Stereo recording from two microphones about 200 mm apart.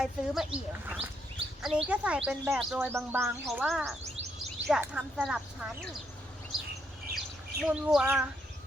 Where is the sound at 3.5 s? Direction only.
Centre (ahead or behind).